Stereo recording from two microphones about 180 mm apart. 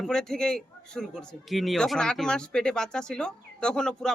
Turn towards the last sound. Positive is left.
turn(degrees=5)  # may be behind; listen again after turning